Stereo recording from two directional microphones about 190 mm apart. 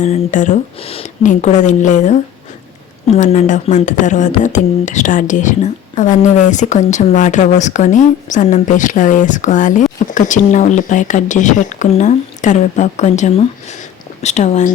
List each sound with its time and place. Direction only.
0.0 s speech: 40° left (ahead or behind)